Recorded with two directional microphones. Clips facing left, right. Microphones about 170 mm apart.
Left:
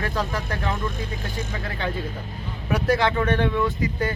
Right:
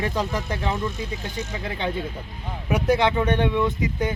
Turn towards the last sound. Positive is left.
turn(degrees=-20)  # may be behind; listen again after turning